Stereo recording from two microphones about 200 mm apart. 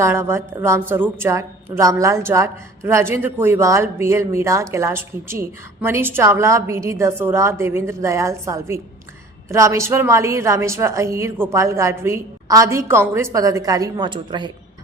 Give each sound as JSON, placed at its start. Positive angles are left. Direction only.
{"t": 0.0, "sound": "a woman's voice", "side_deg": -15}